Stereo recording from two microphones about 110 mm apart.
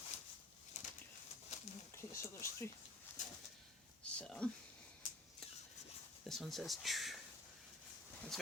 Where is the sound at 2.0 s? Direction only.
25° left (ahead or behind).